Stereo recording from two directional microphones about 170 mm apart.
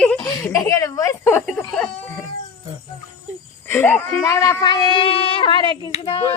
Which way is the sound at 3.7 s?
10° left (ahead or behind).